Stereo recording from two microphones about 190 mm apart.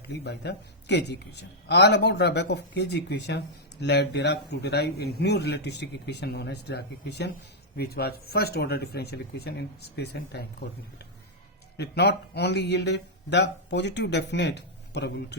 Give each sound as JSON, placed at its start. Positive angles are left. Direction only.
{"t": 0.1, "sound": "a man's voice", "side_deg": 65}
{"t": 11.8, "sound": "a man's voice", "side_deg": 60}